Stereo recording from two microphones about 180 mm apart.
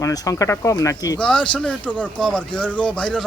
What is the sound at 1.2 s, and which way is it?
Speech, 5° left (ahead or behind).